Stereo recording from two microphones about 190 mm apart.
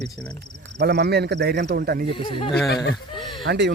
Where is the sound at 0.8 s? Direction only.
60° right (ahead or behind).